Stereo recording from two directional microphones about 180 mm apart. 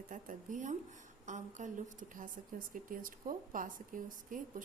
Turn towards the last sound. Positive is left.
turn(degrees=-50)  # may be behind; listen again after turning